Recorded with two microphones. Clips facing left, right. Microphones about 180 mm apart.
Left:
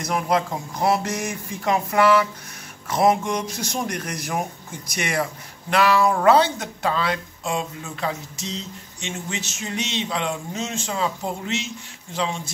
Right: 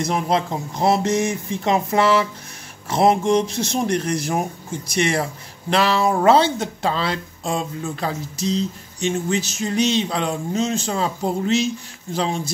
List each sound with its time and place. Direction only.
0.0 s speech: 25° right (ahead or behind)